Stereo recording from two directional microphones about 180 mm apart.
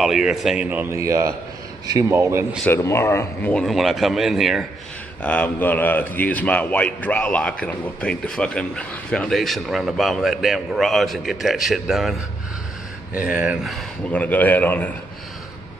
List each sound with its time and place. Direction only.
0.0 s a man's voice: centre (ahead or behind)
2.6 s a man's voice: 15° left (ahead or behind); by 12.2 s centre (ahead or behind)
13.3 s speech: 5° right (ahead or behind)